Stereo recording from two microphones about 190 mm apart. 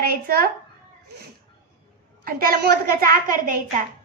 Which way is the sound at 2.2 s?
50° right (ahead or behind).